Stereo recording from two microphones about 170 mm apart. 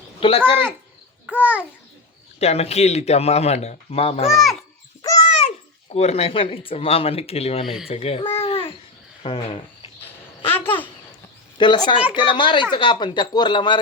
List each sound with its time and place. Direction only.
0.2 s a man's voice: 30° left (ahead or behind)
1.3 s babbling: 10° right (ahead or behind)
2.4 s a man's voice: 40° left (ahead or behind)
4.3 s a child's voice: centre (ahead or behind)
5.9 s a man's voice: 40° left (ahead or behind)
8.4 s babbling: 35° left (ahead or behind)
9.2 s speech: 30° left (ahead or behind)
10.5 s a child's voice: 10° left (ahead or behind)
11.5 s speech: 25° left (ahead or behind)